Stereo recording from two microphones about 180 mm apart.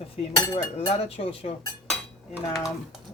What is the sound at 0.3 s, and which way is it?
Speech, 20° left (ahead or behind).